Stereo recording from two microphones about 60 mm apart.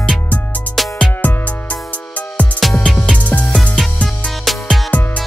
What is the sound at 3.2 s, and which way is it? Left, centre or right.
Music, left.